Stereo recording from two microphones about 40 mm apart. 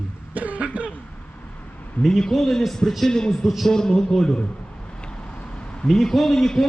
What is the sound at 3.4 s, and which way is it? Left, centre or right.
Speech, centre.